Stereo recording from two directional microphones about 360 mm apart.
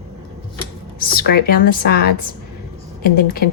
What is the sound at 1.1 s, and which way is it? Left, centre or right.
Speech, left.